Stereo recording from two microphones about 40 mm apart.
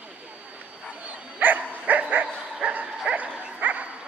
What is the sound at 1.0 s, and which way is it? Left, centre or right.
Bow-wow, right.